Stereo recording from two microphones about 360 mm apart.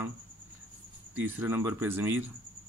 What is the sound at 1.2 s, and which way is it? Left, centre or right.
Speech, centre.